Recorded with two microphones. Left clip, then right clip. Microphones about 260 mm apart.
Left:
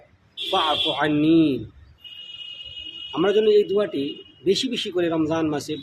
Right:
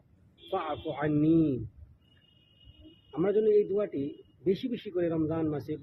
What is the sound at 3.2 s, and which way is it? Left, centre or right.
Speech, centre.